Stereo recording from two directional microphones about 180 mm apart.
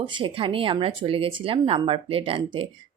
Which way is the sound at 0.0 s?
25° right (ahead or behind).